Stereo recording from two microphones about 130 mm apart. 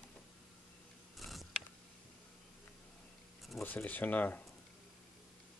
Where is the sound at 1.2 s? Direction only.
Centre (ahead or behind).